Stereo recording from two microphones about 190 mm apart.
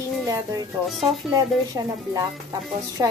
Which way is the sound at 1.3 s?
20° right (ahead or behind).